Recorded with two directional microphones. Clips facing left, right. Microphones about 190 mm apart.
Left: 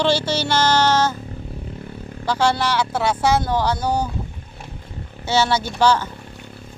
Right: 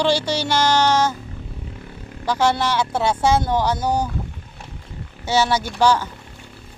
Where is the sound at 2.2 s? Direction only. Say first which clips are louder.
Even; 20° right (ahead or behind).